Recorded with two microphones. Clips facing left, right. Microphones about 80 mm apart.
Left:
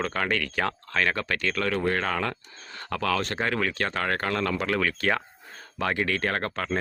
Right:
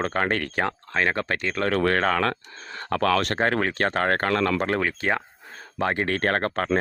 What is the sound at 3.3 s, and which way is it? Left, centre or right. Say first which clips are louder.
Speech: right 4 dB; right.